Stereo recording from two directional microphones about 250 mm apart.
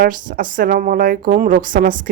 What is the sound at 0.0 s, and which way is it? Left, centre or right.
A woman's voice, right.